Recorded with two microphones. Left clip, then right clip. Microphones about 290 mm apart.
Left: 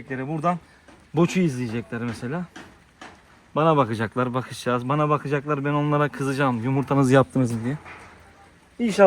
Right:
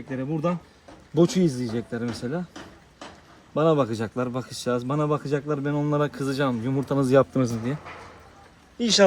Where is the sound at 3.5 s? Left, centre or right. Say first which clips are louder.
Left 2 dB; left.